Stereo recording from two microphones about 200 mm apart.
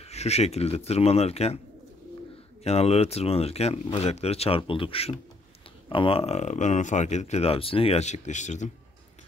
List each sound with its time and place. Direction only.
0.0 s speech: 30° left (ahead or behind)
2.6 s speech: 30° left (ahead or behind)